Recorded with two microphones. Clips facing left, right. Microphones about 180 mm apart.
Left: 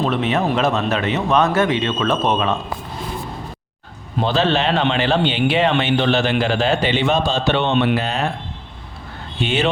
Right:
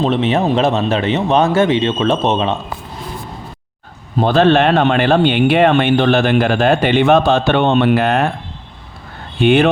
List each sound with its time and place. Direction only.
0.0 s a man's voice: 30° right (ahead or behind)
4.2 s speech: 55° right (ahead or behind)
9.4 s speech: 55° right (ahead or behind)